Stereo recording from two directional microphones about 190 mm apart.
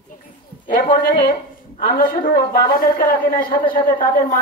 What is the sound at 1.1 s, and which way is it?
A woman's voice, 50° left (ahead or behind).